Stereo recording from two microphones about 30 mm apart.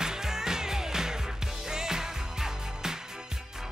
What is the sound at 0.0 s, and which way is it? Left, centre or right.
Music, centre.